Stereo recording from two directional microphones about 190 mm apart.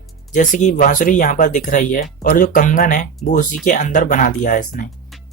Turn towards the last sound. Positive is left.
turn(degrees=45)  # may be behind; listen again after turning